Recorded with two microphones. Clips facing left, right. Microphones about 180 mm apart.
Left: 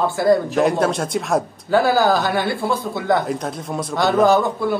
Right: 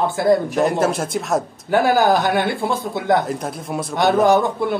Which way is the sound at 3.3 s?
5° right (ahead or behind).